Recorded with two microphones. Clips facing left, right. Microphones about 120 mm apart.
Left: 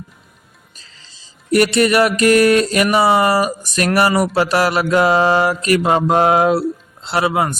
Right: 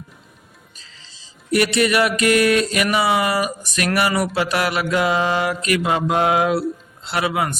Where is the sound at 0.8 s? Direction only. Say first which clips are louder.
Even; 45° left (ahead or behind).